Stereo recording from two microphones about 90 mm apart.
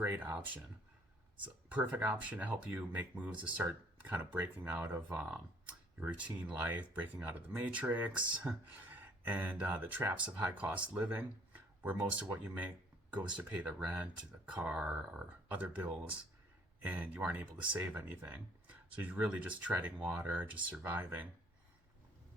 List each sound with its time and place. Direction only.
0.0 s speech: 20° right (ahead or behind)